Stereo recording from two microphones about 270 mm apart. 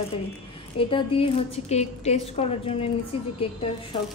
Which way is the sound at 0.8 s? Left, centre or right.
Centre.